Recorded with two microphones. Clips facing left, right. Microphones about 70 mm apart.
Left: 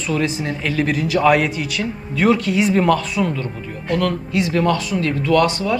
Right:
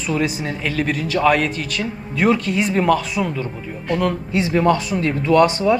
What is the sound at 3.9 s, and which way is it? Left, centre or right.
Speech, centre.